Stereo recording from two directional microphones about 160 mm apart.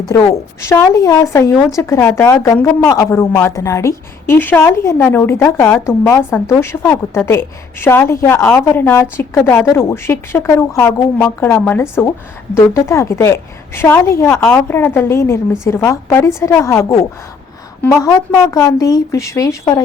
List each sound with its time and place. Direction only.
0.1 s a woman's voice: 20° left (ahead or behind)
18.5 s a woman's voice: 20° left (ahead or behind)